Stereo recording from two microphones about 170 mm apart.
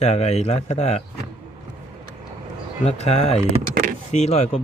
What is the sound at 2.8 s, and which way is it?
Speech, 40° left (ahead or behind).